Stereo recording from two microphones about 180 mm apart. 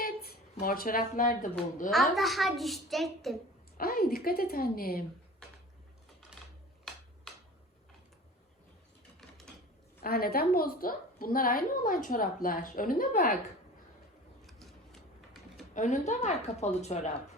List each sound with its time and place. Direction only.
0.0 s speech: 55° left (ahead or behind)
2.1 s a child's voice: centre (ahead or behind)
3.8 s a woman's voice: 55° left (ahead or behind)
10.0 s a woman's voice: 55° left (ahead or behind)
14.4 s a sound: centre (ahead or behind)
15.7 s a woman's voice: 40° left (ahead or behind)